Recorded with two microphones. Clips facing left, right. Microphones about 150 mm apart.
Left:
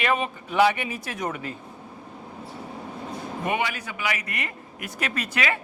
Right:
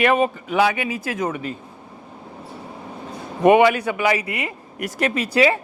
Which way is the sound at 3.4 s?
65° right (ahead or behind).